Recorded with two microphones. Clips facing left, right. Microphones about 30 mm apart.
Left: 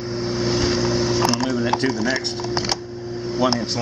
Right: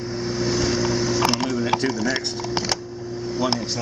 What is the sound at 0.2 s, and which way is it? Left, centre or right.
Vehicle, centre.